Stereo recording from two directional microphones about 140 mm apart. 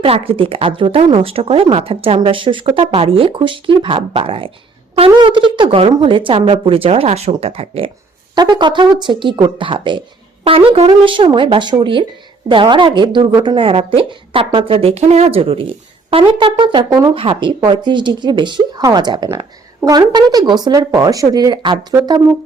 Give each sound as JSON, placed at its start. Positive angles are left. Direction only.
{"t": 0.0, "sound": "speech", "side_deg": -40}
{"t": 8.4, "sound": "speech", "side_deg": -30}